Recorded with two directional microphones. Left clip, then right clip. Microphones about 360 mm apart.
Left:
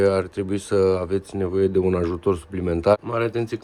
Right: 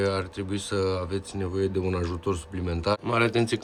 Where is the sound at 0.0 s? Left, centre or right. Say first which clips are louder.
Left 7 dB; centre.